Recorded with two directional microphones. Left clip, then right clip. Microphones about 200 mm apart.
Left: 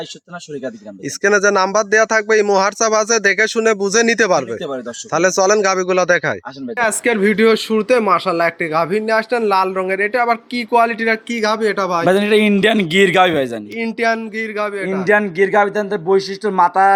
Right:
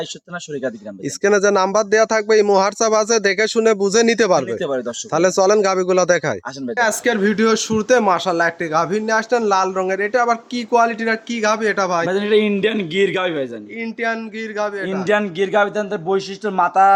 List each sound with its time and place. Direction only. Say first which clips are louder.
0.6 s speech: right 2 dB; centre (ahead or behind)
6.7 s speech: left 1 dB; 5° left (ahead or behind)
11.3 s speech: left 1 dB; 15° left (ahead or behind)
12.0 s a man's voice: left 3 dB; 50° left (ahead or behind)
13.7 s speech: left 5 dB; 30° left (ahead or behind); by 16.9 s 10° left (ahead or behind)